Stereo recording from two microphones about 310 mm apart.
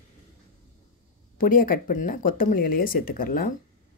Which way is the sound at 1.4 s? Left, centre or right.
Left.